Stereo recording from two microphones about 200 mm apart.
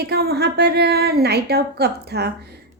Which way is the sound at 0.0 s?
50° right (ahead or behind).